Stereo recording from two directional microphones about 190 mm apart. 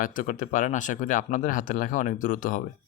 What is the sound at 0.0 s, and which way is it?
Speech, 45° left (ahead or behind).